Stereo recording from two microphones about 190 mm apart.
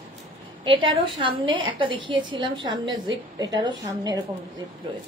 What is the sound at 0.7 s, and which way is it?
A woman's voice, 25° right (ahead or behind).